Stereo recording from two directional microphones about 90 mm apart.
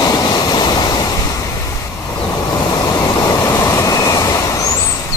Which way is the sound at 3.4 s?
35° left (ahead or behind).